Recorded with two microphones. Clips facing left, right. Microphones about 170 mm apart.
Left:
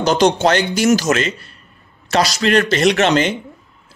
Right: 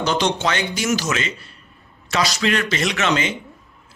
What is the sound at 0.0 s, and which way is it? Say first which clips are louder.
Speech: left 7 dB; 40° left (ahead or behind).